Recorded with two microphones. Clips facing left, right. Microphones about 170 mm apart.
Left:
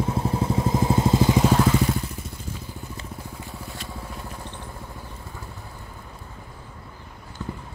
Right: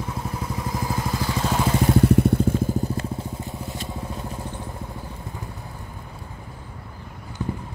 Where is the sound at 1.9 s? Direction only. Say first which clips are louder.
Right 15 dB; 65° right (ahead or behind); by 3.0 s 45° right (ahead or behind).